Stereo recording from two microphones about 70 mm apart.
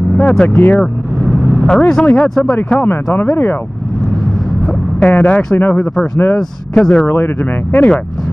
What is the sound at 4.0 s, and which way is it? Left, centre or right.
Vehicle, centre.